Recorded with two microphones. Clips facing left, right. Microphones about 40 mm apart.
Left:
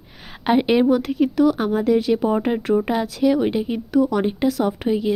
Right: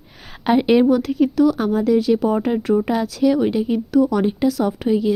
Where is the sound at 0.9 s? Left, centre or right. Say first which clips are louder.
Right 2 dB; left.